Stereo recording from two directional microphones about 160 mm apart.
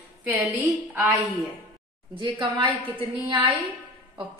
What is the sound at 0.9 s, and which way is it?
Speech, centre (ahead or behind).